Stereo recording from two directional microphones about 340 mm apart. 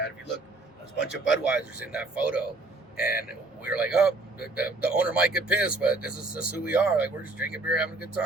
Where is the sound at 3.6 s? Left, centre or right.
Centre.